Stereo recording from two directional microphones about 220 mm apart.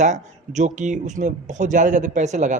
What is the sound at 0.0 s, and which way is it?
Speech, 35° right (ahead or behind).